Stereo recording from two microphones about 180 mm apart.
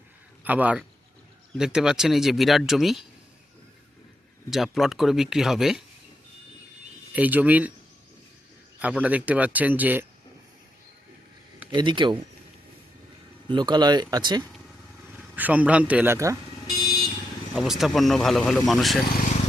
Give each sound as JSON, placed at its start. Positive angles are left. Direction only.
{"t": 0.4, "sound": "speech", "side_deg": -10}
{"t": 4.4, "sound": "speech", "side_deg": 0}
{"t": 7.1, "sound": "speech", "side_deg": -10}
{"t": 8.8, "sound": "speech", "side_deg": -10}
{"t": 11.7, "sound": "speech", "side_deg": -25}
{"t": 13.5, "sound": "speech", "side_deg": -25}
{"t": 15.4, "sound": "speech", "side_deg": -10}
{"t": 17.5, "sound": "speech", "side_deg": 0}